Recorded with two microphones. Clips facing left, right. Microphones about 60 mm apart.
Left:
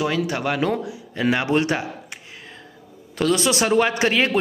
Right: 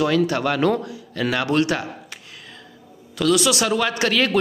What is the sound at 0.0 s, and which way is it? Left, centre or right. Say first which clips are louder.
Speech: right 3 dB; centre.